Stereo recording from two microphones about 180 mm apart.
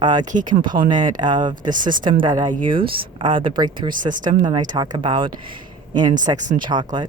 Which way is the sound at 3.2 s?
25° right (ahead or behind).